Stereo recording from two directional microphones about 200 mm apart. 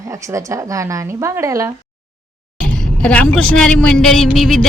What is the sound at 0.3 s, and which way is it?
A woman's voice, 15° right (ahead or behind).